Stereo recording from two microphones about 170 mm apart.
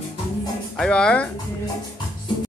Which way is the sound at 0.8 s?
5° left (ahead or behind).